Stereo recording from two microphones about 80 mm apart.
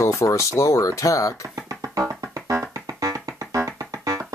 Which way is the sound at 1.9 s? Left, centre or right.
Right.